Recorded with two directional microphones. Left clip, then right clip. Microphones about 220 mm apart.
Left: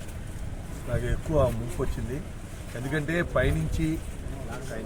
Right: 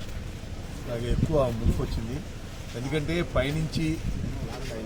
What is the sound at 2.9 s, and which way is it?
Speech, centre (ahead or behind).